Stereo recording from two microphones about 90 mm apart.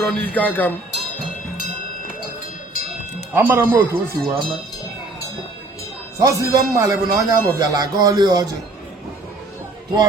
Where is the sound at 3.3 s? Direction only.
25° right (ahead or behind).